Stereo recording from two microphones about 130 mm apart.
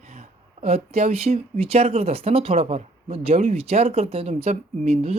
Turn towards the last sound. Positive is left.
turn(degrees=-60)  # may be behind; listen again after turning